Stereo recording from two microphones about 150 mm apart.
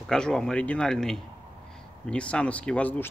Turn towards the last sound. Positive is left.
turn(degrees=10)  # may be behind; listen again after turning